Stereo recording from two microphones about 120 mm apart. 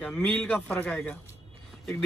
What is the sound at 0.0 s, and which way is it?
Speech, 10° left (ahead or behind).